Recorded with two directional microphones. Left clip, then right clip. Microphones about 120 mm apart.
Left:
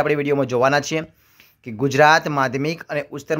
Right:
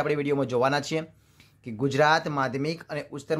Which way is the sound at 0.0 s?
20° left (ahead or behind).